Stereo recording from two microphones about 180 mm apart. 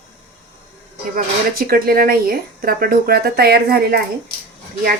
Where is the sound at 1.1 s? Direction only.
55° right (ahead or behind).